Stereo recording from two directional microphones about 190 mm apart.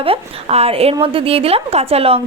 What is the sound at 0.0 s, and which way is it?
A woman's voice, 30° right (ahead or behind).